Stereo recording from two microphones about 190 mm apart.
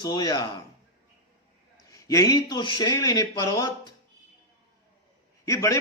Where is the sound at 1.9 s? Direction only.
15° left (ahead or behind).